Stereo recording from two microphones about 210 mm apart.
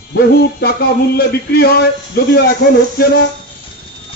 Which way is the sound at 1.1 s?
45° left (ahead or behind).